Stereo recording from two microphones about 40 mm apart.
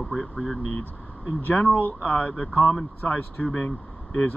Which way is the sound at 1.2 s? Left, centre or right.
Left.